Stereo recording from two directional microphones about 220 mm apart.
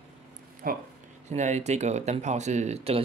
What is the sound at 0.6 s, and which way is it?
Speech, 40° right (ahead or behind).